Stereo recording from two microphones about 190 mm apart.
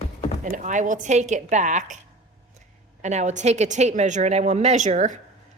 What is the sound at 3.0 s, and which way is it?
A woman's voice, 40° right (ahead or behind).